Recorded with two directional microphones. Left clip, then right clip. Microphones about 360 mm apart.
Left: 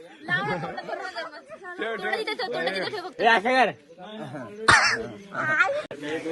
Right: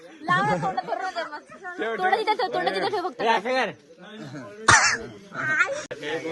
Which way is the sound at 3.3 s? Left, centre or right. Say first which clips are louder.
Left 3 dB; centre.